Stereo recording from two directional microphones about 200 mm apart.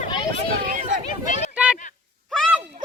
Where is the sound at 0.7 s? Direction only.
40° right (ahead or behind).